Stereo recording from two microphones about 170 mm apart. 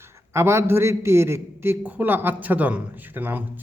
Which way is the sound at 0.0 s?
15° right (ahead or behind).